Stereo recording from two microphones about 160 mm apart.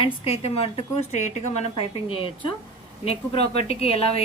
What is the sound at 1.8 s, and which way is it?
A woman's voice, 35° left (ahead or behind).